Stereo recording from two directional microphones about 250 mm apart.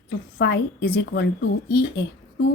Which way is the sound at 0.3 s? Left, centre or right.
Left.